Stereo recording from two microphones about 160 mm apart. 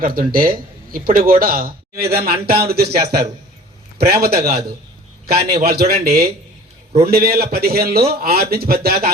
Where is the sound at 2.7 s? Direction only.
75° right (ahead or behind).